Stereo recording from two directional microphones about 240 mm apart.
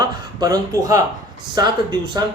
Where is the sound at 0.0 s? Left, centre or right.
Centre.